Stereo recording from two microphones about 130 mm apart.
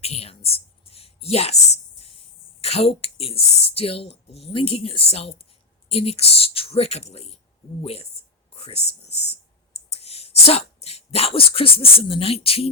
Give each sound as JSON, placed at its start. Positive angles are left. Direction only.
{"t": 0.0, "sound": "a sound", "side_deg": 50}
{"t": 2.6, "sound": "speech", "side_deg": 50}
{"t": 8.5, "sound": "whispering", "side_deg": 50}
{"t": 9.7, "sound": "speech", "side_deg": 55}